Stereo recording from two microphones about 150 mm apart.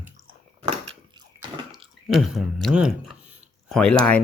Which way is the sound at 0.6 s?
35° right (ahead or behind).